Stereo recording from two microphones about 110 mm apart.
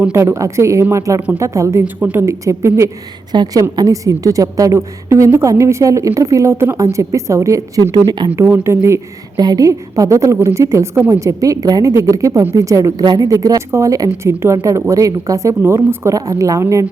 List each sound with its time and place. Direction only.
0.0 s a woman's voice: 25° right (ahead or behind)
1.8 s a woman's voice: 15° right (ahead or behind)
2.2 s a woman's voice: 25° right (ahead or behind)
3.3 s a woman's voice: 35° right (ahead or behind)
8.4 s a woman's voice: 20° right (ahead or behind)
9.4 s a woman's voice: 35° right (ahead or behind)